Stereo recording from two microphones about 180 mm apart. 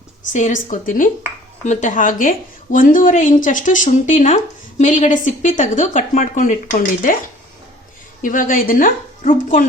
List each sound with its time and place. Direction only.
0.3 s a woman's voice: 45° left (ahead or behind)
8.2 s a woman's voice: 50° left (ahead or behind)